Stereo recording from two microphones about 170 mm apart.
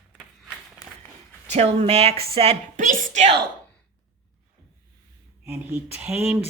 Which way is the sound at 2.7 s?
45° right (ahead or behind).